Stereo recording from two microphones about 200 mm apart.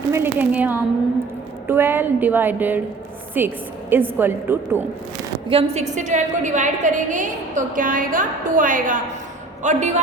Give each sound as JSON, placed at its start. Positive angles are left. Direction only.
{"t": 0.1, "sound": "a woman's voice", "side_deg": -10}
{"t": 5.5, "sound": "a woman's voice", "side_deg": -30}